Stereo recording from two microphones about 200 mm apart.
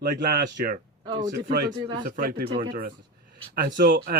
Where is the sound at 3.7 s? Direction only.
55° right (ahead or behind).